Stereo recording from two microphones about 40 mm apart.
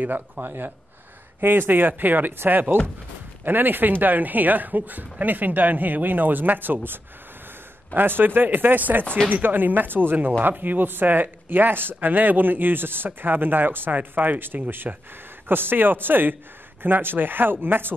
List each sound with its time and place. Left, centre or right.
0.0 s a man's voice: right
13.9 s a man's voice: right